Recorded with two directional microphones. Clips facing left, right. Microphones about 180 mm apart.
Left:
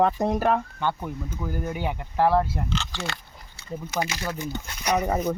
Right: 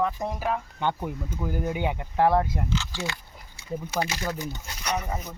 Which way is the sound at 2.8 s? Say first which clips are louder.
Even; 70° left (ahead or behind).